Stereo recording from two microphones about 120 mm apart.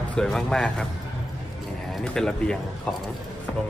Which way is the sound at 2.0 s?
5° left (ahead or behind).